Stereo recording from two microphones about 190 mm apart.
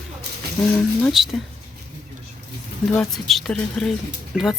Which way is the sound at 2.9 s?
Centre (ahead or behind).